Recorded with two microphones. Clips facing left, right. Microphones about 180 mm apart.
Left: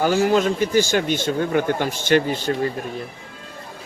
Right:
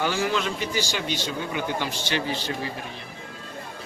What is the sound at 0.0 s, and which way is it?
Speech, 45° left (ahead or behind).